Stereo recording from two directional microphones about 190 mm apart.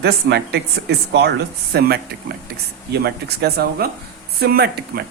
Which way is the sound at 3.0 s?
55° right (ahead or behind).